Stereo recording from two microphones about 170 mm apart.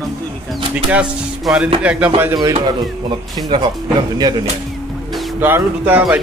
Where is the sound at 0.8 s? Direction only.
5° right (ahead or behind).